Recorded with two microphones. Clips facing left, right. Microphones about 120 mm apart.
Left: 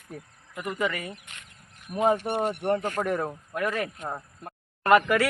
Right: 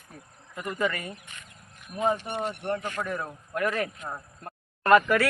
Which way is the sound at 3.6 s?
Centre (ahead or behind).